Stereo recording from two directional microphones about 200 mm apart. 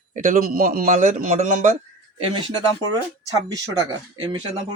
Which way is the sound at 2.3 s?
25° right (ahead or behind).